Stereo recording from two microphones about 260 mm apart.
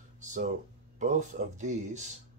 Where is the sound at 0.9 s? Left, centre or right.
Right.